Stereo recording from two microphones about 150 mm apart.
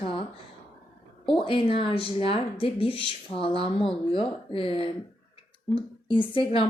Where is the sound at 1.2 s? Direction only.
35° left (ahead or behind).